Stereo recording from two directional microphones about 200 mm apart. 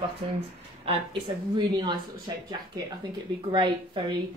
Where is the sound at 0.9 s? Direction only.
20° right (ahead or behind).